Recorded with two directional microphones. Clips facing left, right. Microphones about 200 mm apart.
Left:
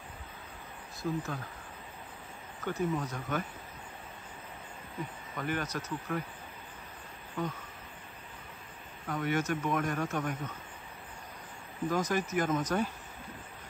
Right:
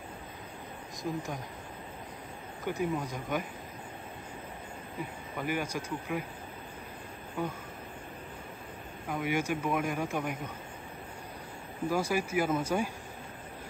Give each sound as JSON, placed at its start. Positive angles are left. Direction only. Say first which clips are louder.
{"t": 1.0, "sound": "speech", "louder": "left 1 dB", "side_deg": -15}
{"t": 2.6, "sound": "speech", "louder": "even", "side_deg": -10}
{"t": 5.4, "sound": "speech", "louder": "right 1 dB", "side_deg": -10}
{"t": 7.4, "sound": "speech", "louder": "right 1 dB", "side_deg": -10}
{"t": 9.1, "sound": "speech", "louder": "even", "side_deg": -10}
{"t": 11.9, "sound": "speech", "louder": "right 1 dB", "side_deg": -10}